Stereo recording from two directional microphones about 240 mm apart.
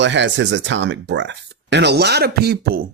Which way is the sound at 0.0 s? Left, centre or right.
Right.